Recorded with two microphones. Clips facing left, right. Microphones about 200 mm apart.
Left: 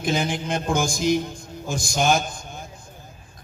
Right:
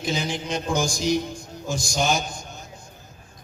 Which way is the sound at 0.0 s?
55° left (ahead or behind).